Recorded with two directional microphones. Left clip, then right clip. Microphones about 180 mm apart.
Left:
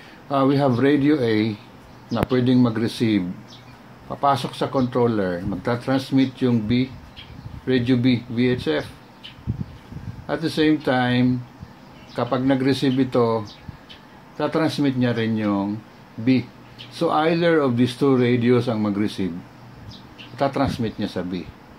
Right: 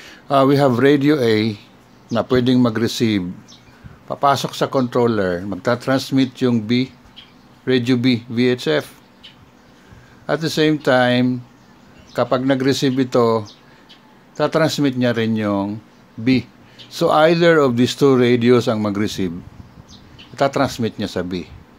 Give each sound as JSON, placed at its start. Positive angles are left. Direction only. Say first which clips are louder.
{"t": 0.0, "sound": "speech", "louder": "right 6 dB", "side_deg": -40}
{"t": 10.2, "sound": "speech", "louder": "right 3 dB", "side_deg": -40}
{"t": 16.9, "sound": "speech", "louder": "right 6 dB", "side_deg": -40}
{"t": 20.3, "sound": "speech", "louder": "right 4 dB", "side_deg": -40}